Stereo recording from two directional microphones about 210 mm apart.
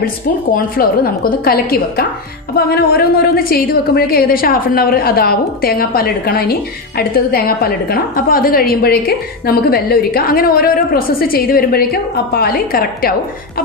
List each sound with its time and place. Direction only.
0.0 s a woman's voice: 45° left (ahead or behind)